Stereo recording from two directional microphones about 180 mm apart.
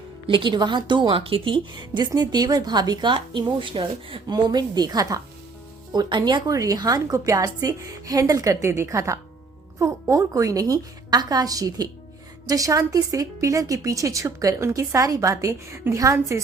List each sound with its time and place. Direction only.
0.3 s a woman's voice: 25° right (ahead or behind)